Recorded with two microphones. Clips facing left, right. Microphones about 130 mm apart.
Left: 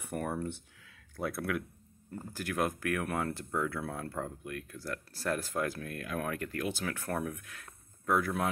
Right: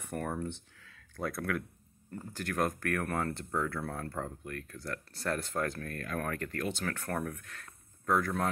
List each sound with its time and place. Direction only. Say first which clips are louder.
0.0 s speech: left 1 dB; 10° left (ahead or behind)